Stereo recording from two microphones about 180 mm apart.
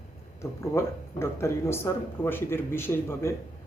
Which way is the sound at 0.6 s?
15° left (ahead or behind).